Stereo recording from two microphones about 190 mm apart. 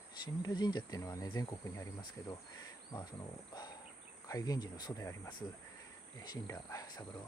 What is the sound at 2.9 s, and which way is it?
Speech, 20° left (ahead or behind).